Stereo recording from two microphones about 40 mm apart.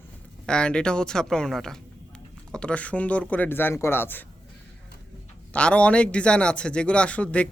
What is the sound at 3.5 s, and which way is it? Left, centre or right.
Speech, left.